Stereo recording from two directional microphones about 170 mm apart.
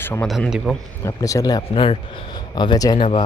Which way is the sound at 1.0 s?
20° left (ahead or behind).